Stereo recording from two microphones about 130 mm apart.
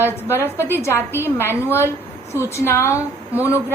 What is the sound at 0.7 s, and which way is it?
A woman's voice, 20° left (ahead or behind).